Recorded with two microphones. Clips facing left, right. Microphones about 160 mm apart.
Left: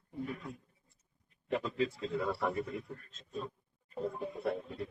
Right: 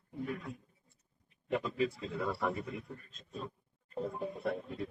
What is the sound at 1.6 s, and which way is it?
A man's voice, centre (ahead or behind).